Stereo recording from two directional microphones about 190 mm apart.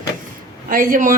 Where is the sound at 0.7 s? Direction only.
50° right (ahead or behind).